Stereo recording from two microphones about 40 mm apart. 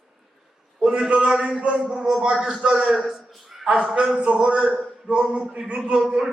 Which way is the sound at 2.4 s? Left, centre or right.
Right.